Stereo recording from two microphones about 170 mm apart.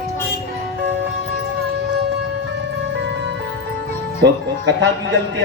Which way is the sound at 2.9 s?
90° right.